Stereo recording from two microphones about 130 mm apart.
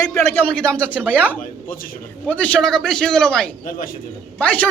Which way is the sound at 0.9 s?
10° right (ahead or behind).